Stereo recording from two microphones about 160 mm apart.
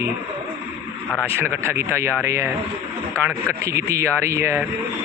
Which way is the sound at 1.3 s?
15° right (ahead or behind).